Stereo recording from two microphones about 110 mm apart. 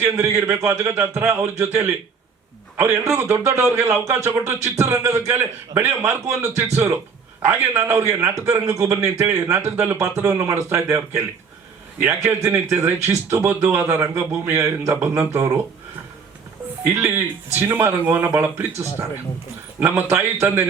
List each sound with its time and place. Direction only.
0.0 s speech: 25° right (ahead or behind)
16.8 s speech: 20° right (ahead or behind)
19.8 s speech: 20° right (ahead or behind)